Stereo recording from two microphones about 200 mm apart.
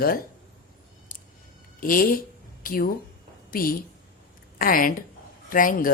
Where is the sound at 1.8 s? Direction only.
45° left (ahead or behind).